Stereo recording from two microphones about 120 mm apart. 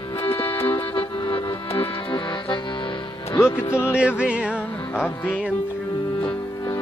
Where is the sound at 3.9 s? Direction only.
10° right (ahead or behind).